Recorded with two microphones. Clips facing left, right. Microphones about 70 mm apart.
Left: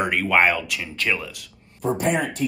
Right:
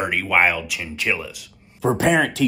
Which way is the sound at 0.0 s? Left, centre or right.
Centre.